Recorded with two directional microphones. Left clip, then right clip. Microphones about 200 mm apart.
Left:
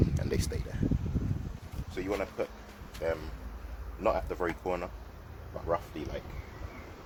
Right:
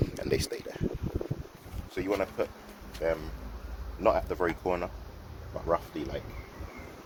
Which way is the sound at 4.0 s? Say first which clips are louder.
Right 4 dB; 15° right (ahead or behind).